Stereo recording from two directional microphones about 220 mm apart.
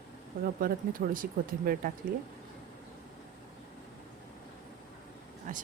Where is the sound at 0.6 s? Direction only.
40° right (ahead or behind).